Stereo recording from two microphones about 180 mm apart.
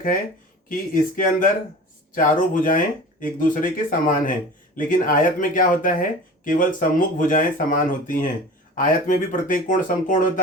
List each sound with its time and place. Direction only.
0.7 s speech: 50° left (ahead or behind)